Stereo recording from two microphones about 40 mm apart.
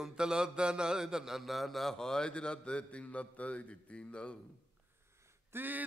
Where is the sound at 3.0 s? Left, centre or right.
Left.